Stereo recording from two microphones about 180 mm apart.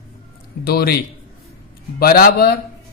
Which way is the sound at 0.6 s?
60° left (ahead or behind).